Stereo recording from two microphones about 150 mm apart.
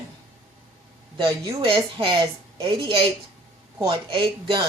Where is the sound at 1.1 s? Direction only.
25° right (ahead or behind).